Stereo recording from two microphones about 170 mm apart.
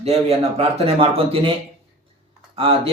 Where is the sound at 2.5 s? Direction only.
35° right (ahead or behind).